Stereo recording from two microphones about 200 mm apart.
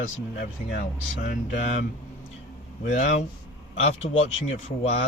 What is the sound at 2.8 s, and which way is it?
Speech, 40° left (ahead or behind).